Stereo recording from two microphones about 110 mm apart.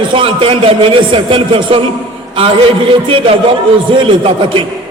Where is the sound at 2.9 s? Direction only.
50° right (ahead or behind).